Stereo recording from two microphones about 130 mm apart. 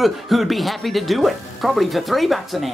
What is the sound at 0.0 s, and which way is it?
A man's voice, centre (ahead or behind).